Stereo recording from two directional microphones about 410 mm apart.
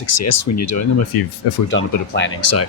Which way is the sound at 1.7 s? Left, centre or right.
Left.